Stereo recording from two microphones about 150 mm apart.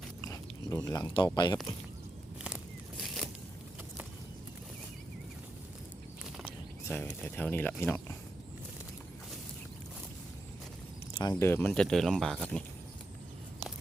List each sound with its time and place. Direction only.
0.2 s chewing: 20° left (ahead or behind)
0.9 s speech: 20° left (ahead or behind)
6.8 s speech: 10° left (ahead or behind)
11.1 s speech: 30° left (ahead or behind)
11.4 s speech: 15° left (ahead or behind)